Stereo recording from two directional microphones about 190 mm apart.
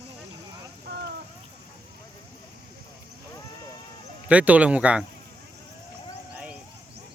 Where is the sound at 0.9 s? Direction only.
60° right (ahead or behind).